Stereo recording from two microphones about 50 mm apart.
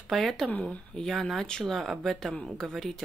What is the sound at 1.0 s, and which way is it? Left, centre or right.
Speech, centre.